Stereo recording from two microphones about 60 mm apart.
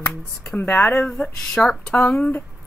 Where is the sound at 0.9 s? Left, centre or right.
Left.